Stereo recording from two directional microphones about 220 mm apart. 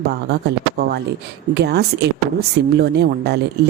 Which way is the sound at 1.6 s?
50° right (ahead or behind).